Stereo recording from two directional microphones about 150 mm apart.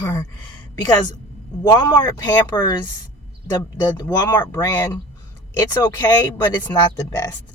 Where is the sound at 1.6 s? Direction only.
20° left (ahead or behind).